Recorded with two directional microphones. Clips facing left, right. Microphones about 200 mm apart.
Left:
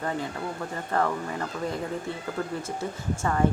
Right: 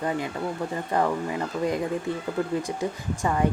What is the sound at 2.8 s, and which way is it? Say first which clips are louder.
Speech: right 2 dB; 15° right (ahead or behind).